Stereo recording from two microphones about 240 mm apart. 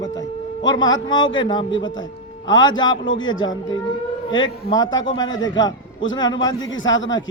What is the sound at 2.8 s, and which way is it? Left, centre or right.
Speech, left.